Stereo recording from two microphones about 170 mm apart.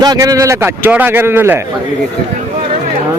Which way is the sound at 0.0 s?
20° right (ahead or behind).